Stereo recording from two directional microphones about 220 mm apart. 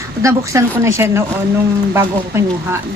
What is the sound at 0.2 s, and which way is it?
A woman's voice, 15° right (ahead or behind).